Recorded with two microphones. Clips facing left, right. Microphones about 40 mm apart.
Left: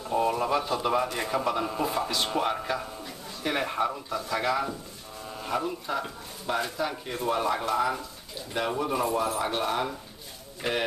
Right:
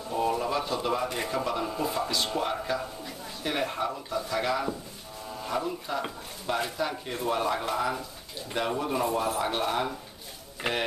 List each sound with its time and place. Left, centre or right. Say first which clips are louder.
0.1 s a sound: left 2 dB; centre
1.1 s a man's voice: left 2 dB; centre
10.6 s speech: left 1 dB; centre